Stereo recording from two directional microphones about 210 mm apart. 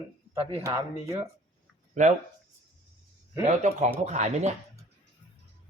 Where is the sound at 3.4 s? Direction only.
35° right (ahead or behind).